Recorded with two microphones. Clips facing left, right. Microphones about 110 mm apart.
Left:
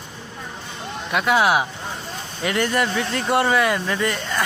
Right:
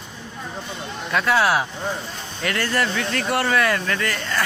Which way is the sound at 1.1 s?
20° left (ahead or behind).